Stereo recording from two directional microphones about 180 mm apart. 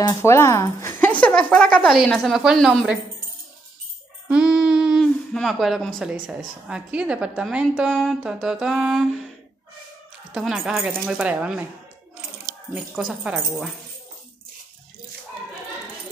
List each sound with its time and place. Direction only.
0.0 s a woman's voice: 15° left (ahead or behind); by 3.0 s centre (ahead or behind)
4.3 s a sound: 5° right (ahead or behind)
5.9 s a woman's voice: 5° right (ahead or behind)
10.3 s a woman's voice: 5° right (ahead or behind)
12.7 s a woman's voice: 5° right (ahead or behind)